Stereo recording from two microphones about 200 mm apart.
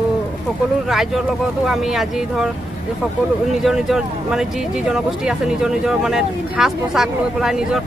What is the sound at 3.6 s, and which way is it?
Speech, centre (ahead or behind).